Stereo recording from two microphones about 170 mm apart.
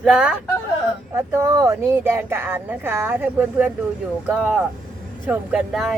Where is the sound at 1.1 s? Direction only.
15° right (ahead or behind).